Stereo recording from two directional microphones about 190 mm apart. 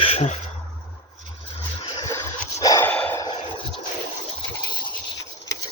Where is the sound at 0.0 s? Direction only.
30° left (ahead or behind).